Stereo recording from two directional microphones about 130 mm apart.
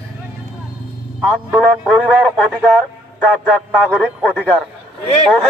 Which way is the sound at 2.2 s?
10° left (ahead or behind).